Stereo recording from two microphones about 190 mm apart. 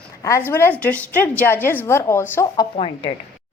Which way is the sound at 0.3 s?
15° left (ahead or behind).